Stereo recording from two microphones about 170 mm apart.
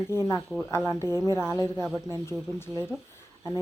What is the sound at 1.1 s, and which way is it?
A woman's voice, 25° right (ahead or behind).